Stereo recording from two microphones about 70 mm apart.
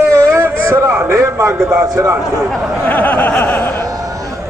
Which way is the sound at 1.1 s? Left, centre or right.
Right.